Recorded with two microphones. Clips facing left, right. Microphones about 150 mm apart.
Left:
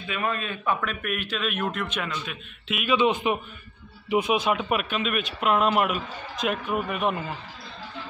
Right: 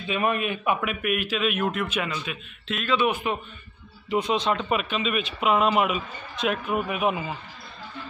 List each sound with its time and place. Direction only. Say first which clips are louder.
0.0 s a man's voice: right 4 dB; 20° right (ahead or behind); by 2.8 s centre (ahead or behind)
2.8 s a man's voice: left 2 dB; 15° left (ahead or behind); by 7.3 s 5° right (ahead or behind)